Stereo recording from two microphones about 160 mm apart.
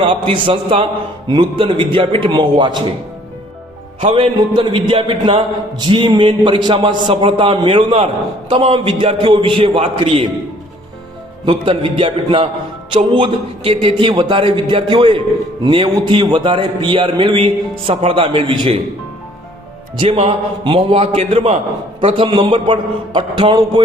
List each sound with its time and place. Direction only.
0.0 s a man's voice: 30° right (ahead or behind)
4.0 s a man's voice: 35° right (ahead or behind)
11.4 s a man's voice: 35° right (ahead or behind)
20.0 s a man's voice: 40° right (ahead or behind)